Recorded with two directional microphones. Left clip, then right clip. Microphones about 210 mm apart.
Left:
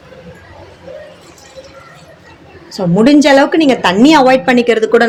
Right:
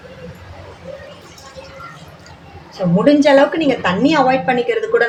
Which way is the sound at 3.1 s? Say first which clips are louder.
Left 2 dB; 50° left (ahead or behind).